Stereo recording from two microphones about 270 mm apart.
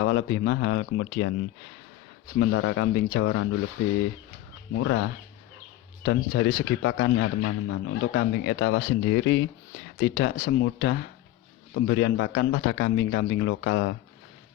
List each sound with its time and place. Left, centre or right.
0.0 s a man's voice: left
2.4 s a man's voice: left
4.8 s a man's voice: left
6.1 s a man's voice: left